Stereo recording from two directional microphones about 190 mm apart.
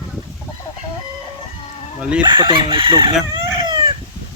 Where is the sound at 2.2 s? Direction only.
25° right (ahead or behind).